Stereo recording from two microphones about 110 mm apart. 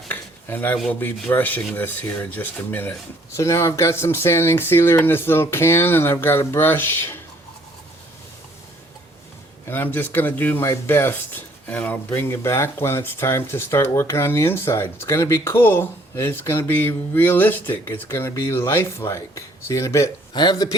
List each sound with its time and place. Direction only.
0.1 s dishes: 20° left (ahead or behind)
0.9 s speech: 15° left (ahead or behind)
9.6 s speech: 20° left (ahead or behind)
20.3 s speech: 40° left (ahead or behind)